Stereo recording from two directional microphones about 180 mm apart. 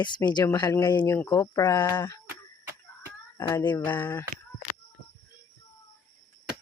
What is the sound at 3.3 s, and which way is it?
Speech, 15° left (ahead or behind).